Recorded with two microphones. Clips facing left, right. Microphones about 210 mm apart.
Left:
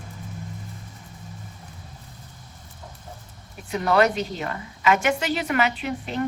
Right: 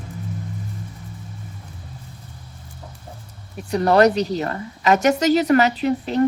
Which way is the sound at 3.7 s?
40° right (ahead or behind).